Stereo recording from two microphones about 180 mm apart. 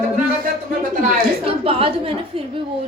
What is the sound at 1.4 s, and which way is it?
Speech, 30° right (ahead or behind).